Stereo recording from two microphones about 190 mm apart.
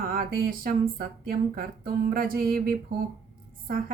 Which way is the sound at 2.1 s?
50° right (ahead or behind).